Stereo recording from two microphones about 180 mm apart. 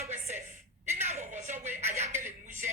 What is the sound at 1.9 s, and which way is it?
Speech, 40° right (ahead or behind).